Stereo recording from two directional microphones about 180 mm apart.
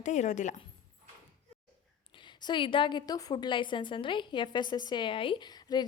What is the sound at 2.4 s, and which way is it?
A woman's voice, 25° left (ahead or behind).